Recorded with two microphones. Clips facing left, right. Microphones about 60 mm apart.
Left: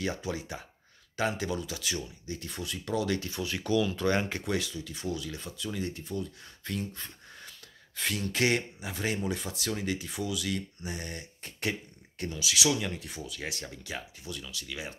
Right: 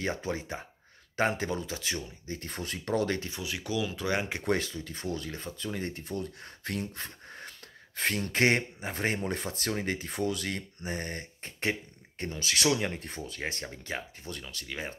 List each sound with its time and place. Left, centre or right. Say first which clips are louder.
0.0 s speech: right 1 dB; right
3.2 s speech: left 3 dB; centre
3.4 s speech: left 5 dB; centre
4.5 s speech: right 2 dB; right
7.2 s gasp: right 4 dB; right
8.8 s speech: right 1 dB; right
12.4 s speech: right 1 dB; right